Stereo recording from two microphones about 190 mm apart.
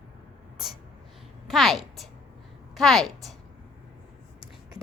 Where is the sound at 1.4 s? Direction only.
Centre (ahead or behind).